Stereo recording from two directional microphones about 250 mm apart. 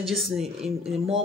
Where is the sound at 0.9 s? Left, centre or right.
Right.